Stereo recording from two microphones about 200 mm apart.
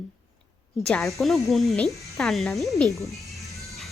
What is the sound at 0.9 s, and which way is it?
Speech, 5° left (ahead or behind).